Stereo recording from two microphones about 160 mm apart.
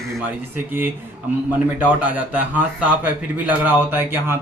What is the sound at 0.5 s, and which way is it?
Speech, 15° right (ahead or behind).